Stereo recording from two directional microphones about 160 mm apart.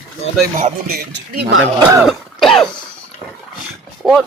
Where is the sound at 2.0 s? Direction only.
Centre (ahead or behind).